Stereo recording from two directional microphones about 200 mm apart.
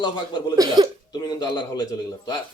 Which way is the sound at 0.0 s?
20° left (ahead or behind).